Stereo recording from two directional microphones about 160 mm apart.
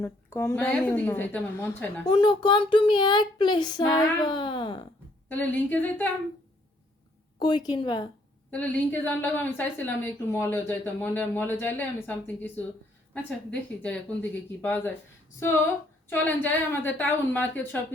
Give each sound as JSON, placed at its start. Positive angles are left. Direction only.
{"t": 0.0, "sound": "speech", "side_deg": 15}
{"t": 2.0, "sound": "speech", "side_deg": 30}
{"t": 5.3, "sound": "speech", "side_deg": 10}
{"t": 7.3, "sound": "speech", "side_deg": 30}
{"t": 8.4, "sound": "speech", "side_deg": 10}
{"t": 16.0, "sound": "speech", "side_deg": 10}